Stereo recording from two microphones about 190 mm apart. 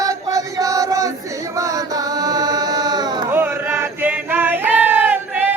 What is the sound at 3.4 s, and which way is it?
Male singing, 15° right (ahead or behind).